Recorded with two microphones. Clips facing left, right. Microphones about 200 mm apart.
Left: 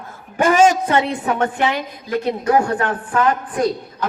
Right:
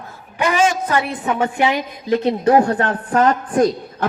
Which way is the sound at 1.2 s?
10° right (ahead or behind).